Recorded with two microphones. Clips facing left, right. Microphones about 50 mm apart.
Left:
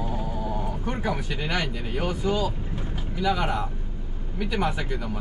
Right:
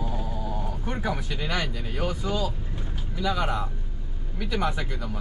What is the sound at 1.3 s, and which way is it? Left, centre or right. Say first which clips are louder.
Speech: left 1 dB; centre.